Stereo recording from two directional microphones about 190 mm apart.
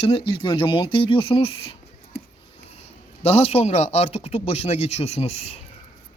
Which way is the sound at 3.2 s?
30° left (ahead or behind).